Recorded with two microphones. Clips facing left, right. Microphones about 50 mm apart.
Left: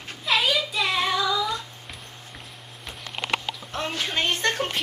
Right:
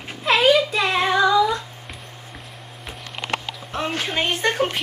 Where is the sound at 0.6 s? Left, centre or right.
Right.